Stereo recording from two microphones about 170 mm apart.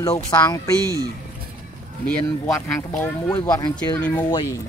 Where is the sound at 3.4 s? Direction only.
20° left (ahead or behind).